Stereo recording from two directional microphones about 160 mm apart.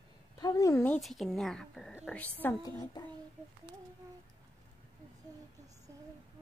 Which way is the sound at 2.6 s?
25° left (ahead or behind).